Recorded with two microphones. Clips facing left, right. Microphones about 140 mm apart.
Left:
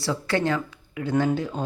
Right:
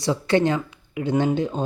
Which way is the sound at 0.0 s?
20° right (ahead or behind).